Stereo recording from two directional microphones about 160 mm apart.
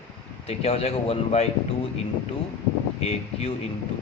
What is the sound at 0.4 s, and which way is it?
Speech, 40° left (ahead or behind).